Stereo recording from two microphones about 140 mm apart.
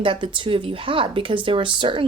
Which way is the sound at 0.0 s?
35° right (ahead or behind).